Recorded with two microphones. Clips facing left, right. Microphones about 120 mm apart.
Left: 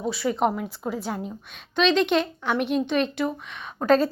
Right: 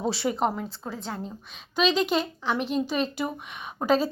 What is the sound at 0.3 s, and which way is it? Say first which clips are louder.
Speech: left 3 dB; centre (ahead or behind).